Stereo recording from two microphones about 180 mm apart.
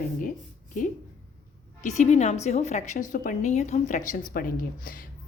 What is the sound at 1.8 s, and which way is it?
A woman's voice, 40° left (ahead or behind).